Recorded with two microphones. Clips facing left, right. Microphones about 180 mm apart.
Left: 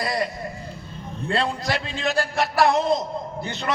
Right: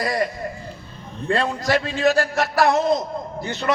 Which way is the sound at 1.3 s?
45° right (ahead or behind).